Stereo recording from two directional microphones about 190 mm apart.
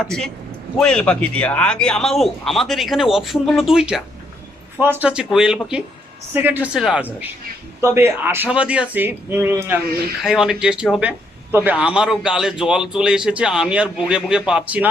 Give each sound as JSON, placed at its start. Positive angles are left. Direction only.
{"t": 0.0, "sound": "a man's voice", "side_deg": 5}